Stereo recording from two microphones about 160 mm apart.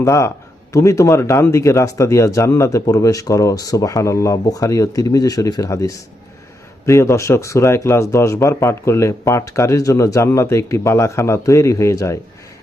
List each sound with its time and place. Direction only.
0.0 s speech: 20° left (ahead or behind)